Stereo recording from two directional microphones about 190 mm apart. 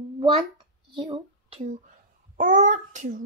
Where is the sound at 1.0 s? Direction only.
30° right (ahead or behind).